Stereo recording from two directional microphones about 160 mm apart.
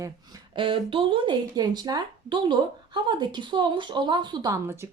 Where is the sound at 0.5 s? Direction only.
30° right (ahead or behind).